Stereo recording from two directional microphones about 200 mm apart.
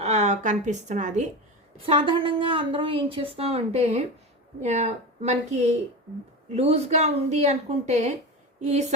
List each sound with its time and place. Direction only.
0.0 s speech: 35° right (ahead or behind)
1.9 s a woman's voice: 25° right (ahead or behind)